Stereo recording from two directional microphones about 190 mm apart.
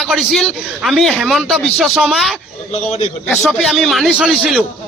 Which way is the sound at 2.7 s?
35° left (ahead or behind).